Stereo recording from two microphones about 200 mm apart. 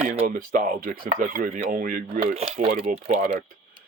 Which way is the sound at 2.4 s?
30° right (ahead or behind).